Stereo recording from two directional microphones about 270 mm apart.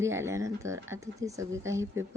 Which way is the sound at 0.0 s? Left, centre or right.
Centre.